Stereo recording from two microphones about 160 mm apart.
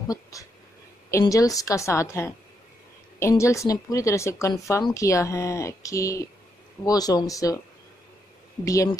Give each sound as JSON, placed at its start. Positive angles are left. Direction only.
{"t": 0.1, "sound": "speech", "side_deg": 20}
{"t": 8.6, "sound": "speech", "side_deg": 20}